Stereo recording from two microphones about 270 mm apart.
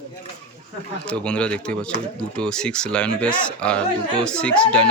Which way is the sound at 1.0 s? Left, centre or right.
Centre.